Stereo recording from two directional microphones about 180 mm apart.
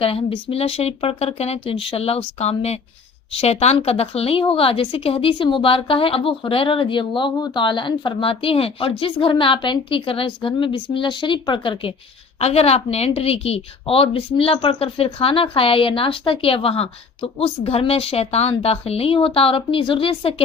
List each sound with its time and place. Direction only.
0.0 s a woman's voice: 30° left (ahead or behind)